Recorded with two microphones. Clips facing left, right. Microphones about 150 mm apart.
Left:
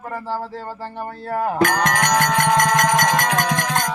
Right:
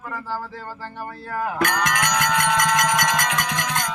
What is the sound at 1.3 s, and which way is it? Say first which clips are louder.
Music: left 5 dB; 30° left (ahead or behind).